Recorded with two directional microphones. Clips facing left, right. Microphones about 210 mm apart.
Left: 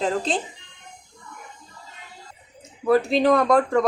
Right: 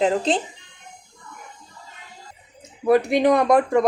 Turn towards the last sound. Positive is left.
turn(degrees=-10)  # may be behind; listen again after turning